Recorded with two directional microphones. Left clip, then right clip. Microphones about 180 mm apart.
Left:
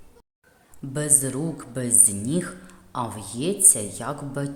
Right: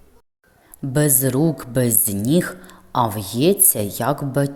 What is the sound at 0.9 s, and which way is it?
A woman's voice, 35° right (ahead or behind).